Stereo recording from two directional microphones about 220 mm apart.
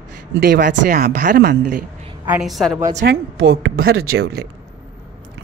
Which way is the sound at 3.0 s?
55° right (ahead or behind).